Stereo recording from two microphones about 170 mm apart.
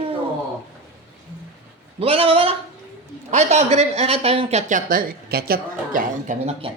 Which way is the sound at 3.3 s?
40° right (ahead or behind).